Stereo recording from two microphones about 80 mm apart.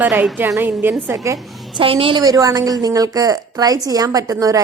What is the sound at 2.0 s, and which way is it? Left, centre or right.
Speech, right.